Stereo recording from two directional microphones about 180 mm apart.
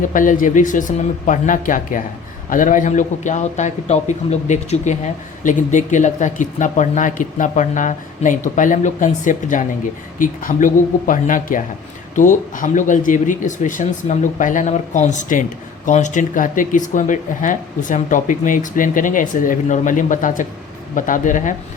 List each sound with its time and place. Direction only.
0.0 s a man's voice: 45° left (ahead or behind)